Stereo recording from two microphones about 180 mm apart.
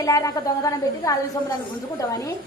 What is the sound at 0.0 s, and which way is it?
A woman's voice, 20° left (ahead or behind).